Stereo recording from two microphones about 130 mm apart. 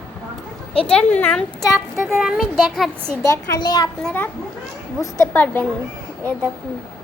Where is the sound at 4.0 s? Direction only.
10° left (ahead or behind).